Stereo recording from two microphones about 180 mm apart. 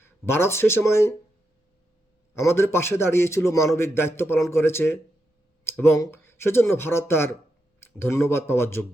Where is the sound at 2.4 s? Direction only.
15° left (ahead or behind).